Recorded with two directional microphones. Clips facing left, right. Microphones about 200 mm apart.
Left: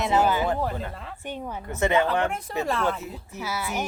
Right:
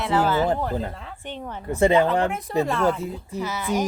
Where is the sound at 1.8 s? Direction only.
30° right (ahead or behind).